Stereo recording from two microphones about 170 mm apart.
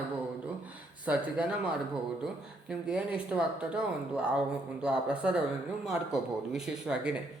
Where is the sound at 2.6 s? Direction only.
5° right (ahead or behind).